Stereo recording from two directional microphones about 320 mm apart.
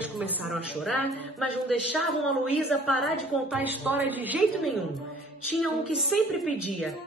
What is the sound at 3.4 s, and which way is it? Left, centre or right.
A woman's voice, centre.